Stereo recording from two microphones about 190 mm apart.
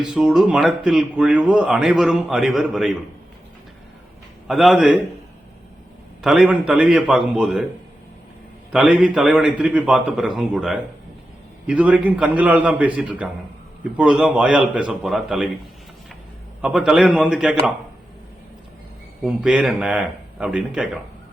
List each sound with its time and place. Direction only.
0.0 s speech: 5° right (ahead or behind)
4.4 s speech: centre (ahead or behind)
6.2 s speech: 5° right (ahead or behind)
8.7 s a man's voice: 5° right (ahead or behind)
16.6 s speech: 5° right (ahead or behind)
19.2 s speech: 5° right (ahead or behind)